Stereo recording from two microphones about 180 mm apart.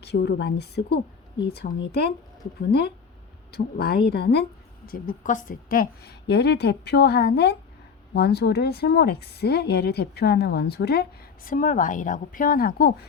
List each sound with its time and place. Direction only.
0.0 s a woman's voice: 65° left (ahead or behind)
4.9 s a woman's voice: 50° left (ahead or behind)